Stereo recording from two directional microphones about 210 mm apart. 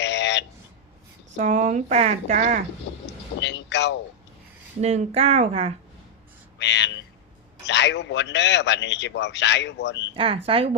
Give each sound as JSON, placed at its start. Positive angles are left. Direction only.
{"t": 0.0, "sound": "a sound", "side_deg": 55}
{"t": 1.4, "sound": "speech", "side_deg": -35}
{"t": 2.9, "sound": "vehicle", "side_deg": 55}
{"t": 4.8, "sound": "speech", "side_deg": -30}
{"t": 6.6, "sound": "a man's voice", "side_deg": 55}
{"t": 10.2, "sound": "speech", "side_deg": -25}